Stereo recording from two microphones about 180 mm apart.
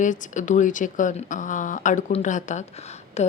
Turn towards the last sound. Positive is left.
turn(degrees=35)  # may be behind; listen again after turning